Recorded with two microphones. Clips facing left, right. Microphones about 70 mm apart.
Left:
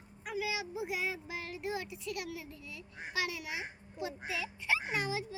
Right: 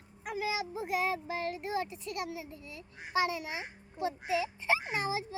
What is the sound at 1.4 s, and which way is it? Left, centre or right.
A child's voice, right.